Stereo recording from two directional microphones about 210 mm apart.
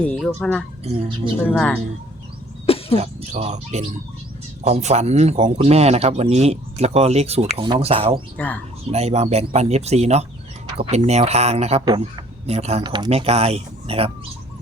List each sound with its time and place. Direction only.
0.0 s speech: 5° left (ahead or behind)
0.9 s speech: 25° right (ahead or behind)
1.5 s speech: 5° left (ahead or behind)
2.6 s cough: 25° left (ahead or behind)
3.0 s speech: 30° right (ahead or behind)
8.4 s speech: 5° left (ahead or behind)
8.9 s speech: 30° right (ahead or behind)